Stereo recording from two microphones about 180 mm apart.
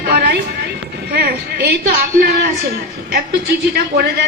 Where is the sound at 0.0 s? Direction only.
70° right (ahead or behind).